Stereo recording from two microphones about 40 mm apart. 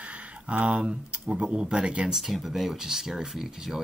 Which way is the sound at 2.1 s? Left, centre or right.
Centre.